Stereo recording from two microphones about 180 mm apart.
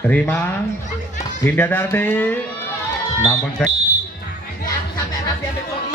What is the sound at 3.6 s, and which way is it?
Speech, 5° left (ahead or behind).